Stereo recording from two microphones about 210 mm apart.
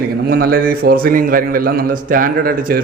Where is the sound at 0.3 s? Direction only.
45° right (ahead or behind).